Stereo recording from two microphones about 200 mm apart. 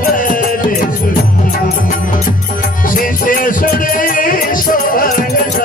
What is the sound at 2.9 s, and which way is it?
Music, 45° left (ahead or behind).